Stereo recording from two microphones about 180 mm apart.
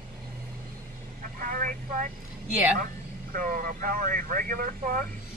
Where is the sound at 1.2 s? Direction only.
50° right (ahead or behind).